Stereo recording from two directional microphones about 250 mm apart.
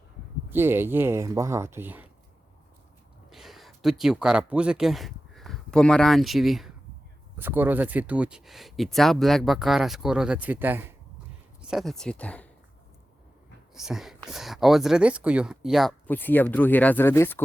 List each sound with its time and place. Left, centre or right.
0.5 s speech: centre
3.2 s speech: centre
13.7 s speech: centre